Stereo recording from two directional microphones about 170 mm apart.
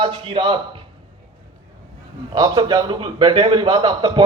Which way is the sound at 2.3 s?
25° right (ahead or behind).